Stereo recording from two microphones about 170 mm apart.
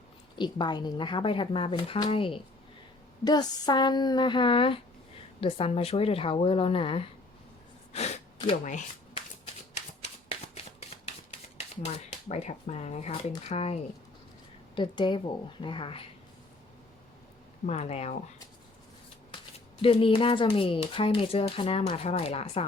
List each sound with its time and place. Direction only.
0.3 s speech: 25° left (ahead or behind)
7.9 s gasp: 40° left (ahead or behind)
8.6 s speech: 45° left (ahead or behind)
9.7 s shuffling cards: 40° left (ahead or behind)
12.3 s speech: 40° left (ahead or behind)
14.8 s speech: 30° left (ahead or behind)
17.7 s speech: 40° left (ahead or behind)
19.3 s speech: 30° left (ahead or behind)